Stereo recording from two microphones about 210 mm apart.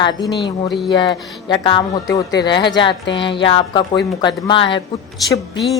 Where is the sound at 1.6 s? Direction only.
20° left (ahead or behind).